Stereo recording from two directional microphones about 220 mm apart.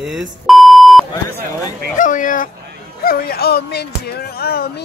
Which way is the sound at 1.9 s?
35° left (ahead or behind).